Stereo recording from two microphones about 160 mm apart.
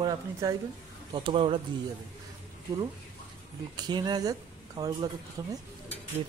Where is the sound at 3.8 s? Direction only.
25° right (ahead or behind).